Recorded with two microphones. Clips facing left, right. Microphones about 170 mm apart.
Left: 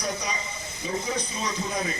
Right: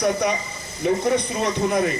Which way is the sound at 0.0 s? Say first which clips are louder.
Right 10 dB; 55° right (ahead or behind).